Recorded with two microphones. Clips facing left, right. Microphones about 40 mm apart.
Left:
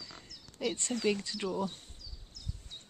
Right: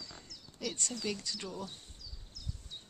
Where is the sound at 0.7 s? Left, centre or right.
Left.